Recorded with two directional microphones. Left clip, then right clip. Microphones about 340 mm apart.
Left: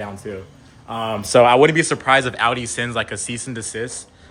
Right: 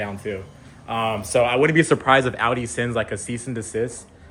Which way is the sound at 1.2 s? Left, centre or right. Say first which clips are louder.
Left 8 dB; left.